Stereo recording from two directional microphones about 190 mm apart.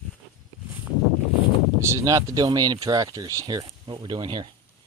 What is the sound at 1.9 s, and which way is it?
Speech, 15° right (ahead or behind).